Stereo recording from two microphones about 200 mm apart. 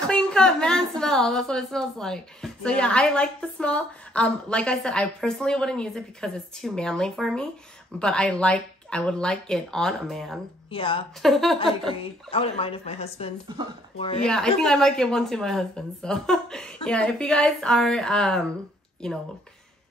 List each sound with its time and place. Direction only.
0.0 s a woman's voice: 5° left (ahead or behind)
10.7 s speech: 25° left (ahead or behind)
11.2 s a woman's voice: centre (ahead or behind)
12.0 s speech: 30° left (ahead or behind)
13.5 s speech: 25° right (ahead or behind)
13.9 s speech: 30° left (ahead or behind)
14.2 s a woman's voice: 5° left (ahead or behind)